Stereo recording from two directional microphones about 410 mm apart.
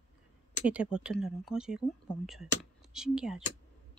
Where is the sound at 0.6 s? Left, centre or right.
Centre.